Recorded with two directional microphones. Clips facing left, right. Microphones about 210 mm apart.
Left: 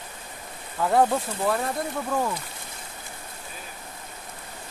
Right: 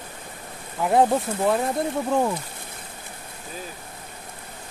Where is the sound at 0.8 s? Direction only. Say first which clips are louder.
Right 2 dB; 20° right (ahead or behind).